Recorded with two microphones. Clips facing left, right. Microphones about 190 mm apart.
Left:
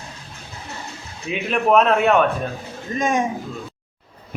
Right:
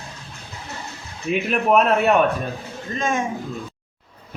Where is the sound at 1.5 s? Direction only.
5° right (ahead or behind).